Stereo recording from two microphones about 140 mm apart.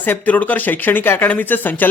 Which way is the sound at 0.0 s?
10° left (ahead or behind).